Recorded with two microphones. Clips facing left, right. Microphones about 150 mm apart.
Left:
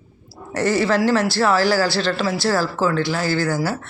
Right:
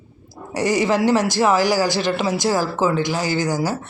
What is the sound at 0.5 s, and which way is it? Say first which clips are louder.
Speech: even; 15° right (ahead or behind).